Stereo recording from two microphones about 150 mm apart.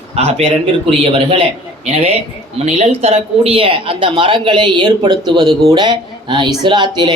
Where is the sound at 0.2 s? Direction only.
45° right (ahead or behind).